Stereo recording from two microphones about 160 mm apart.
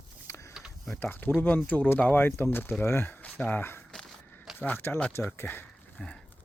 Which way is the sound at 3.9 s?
5° left (ahead or behind).